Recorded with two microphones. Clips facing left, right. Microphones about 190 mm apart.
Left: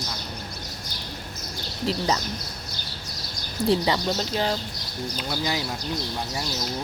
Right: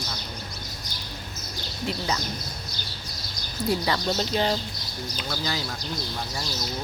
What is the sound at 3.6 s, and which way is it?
Speech, 45° left (ahead or behind).